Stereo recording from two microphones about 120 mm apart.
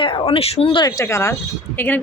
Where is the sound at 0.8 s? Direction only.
25° left (ahead or behind).